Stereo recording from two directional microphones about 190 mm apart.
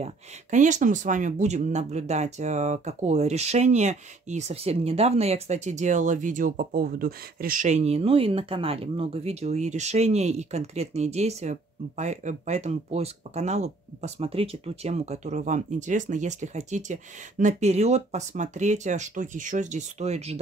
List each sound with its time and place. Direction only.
0.0 s speech: 40° right (ahead or behind)